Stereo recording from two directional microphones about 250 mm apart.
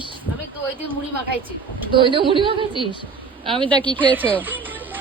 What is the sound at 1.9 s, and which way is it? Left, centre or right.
A woman's voice, centre.